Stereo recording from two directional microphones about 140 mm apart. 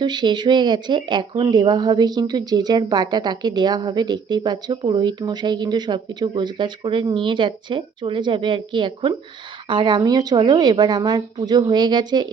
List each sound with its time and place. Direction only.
0.0 s speech: 30° right (ahead or behind)